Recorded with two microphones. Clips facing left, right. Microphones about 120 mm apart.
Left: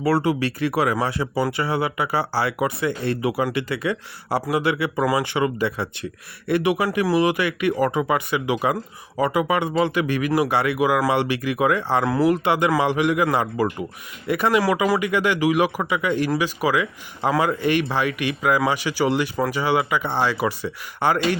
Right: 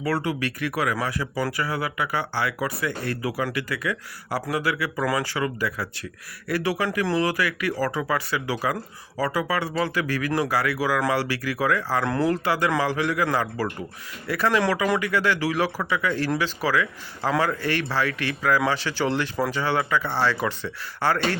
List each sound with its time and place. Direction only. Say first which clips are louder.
0.0 s speech: left 5 dB; 30° left (ahead or behind)
12.0 s speech: left 5 dB; 5° left (ahead or behind)
12.5 s speech: left 4 dB; 20° left (ahead or behind)